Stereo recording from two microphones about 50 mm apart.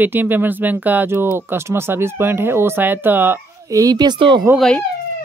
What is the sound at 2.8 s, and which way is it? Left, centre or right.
Speech, right.